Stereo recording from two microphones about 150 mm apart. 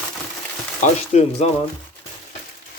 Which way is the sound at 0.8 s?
45° left (ahead or behind).